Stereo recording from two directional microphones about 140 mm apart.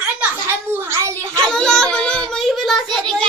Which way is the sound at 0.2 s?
15° right (ahead or behind).